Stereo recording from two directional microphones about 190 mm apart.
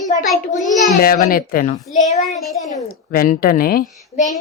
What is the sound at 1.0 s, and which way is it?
Speech, 50° left (ahead or behind).